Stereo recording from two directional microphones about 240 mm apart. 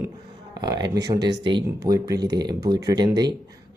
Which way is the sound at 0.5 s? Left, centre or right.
Centre.